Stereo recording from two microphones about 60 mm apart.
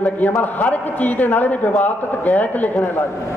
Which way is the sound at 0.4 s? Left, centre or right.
Left.